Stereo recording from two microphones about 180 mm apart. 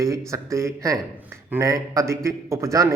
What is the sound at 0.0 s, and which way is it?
A man's voice, 15° right (ahead or behind).